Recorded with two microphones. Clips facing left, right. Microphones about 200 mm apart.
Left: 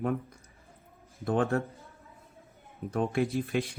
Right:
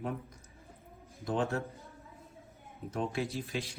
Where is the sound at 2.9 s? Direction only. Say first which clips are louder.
Left 6 dB; 55° left (ahead or behind).